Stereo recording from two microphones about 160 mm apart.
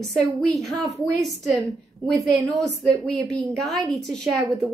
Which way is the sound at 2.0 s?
Centre (ahead or behind).